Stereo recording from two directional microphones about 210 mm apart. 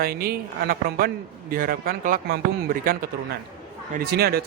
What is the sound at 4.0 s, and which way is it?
Speech, 50° right (ahead or behind).